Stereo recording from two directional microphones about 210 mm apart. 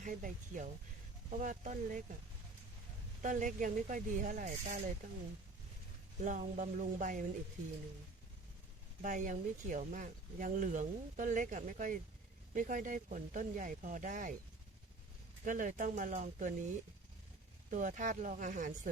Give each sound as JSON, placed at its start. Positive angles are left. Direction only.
{"t": 0.0, "sound": "speech", "side_deg": -40}
{"t": 3.2, "sound": "speech", "side_deg": -35}
{"t": 6.2, "sound": "speech", "side_deg": -35}
{"t": 9.0, "sound": "speech", "side_deg": -35}
{"t": 15.4, "sound": "speech", "side_deg": -40}
{"t": 17.7, "sound": "speech", "side_deg": -35}